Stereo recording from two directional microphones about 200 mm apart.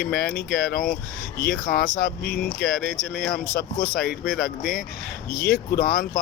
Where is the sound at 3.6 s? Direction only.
50° left (ahead or behind).